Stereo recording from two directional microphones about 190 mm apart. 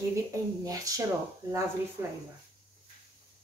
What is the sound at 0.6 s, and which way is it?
Speech, 20° right (ahead or behind).